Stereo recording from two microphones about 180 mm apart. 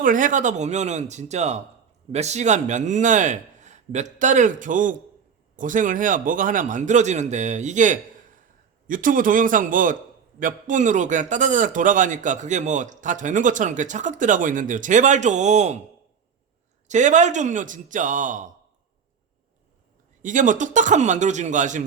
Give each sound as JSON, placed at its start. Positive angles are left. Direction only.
{"t": 0.0, "sound": "a man's voice", "side_deg": -45}
{"t": 16.9, "sound": "a man's voice", "side_deg": -40}
{"t": 20.2, "sound": "a man's voice", "side_deg": -45}